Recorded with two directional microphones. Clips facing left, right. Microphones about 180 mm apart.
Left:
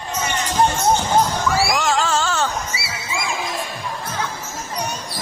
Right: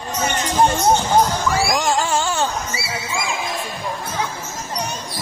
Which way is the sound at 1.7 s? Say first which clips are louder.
Even; 15° right (ahead or behind).